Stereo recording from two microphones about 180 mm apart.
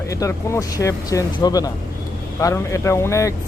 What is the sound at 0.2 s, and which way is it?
Speech, 15° left (ahead or behind).